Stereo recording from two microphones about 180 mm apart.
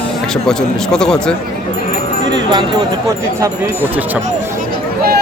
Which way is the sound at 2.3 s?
25° right (ahead or behind).